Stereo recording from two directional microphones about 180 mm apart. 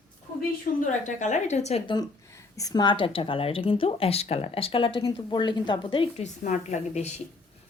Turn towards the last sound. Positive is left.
turn(degrees=40)  # may be behind; listen again after turning